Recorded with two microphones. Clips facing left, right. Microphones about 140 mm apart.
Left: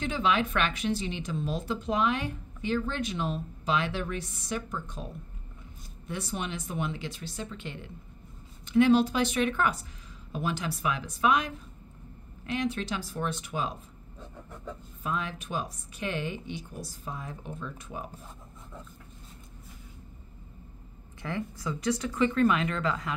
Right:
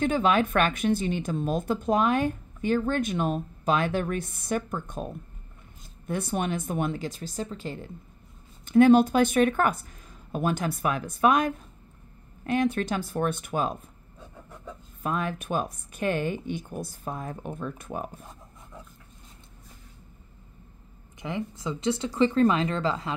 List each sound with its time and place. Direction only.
0.0 s speech: 50° right (ahead or behind)
8.6 s speech: 50° right (ahead or behind)
15.0 s speech: 50° right (ahead or behind)
21.2 s speech: 20° right (ahead or behind)